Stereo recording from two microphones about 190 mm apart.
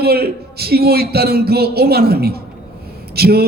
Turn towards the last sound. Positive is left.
turn(degrees=-55)  # may be behind; listen again after turning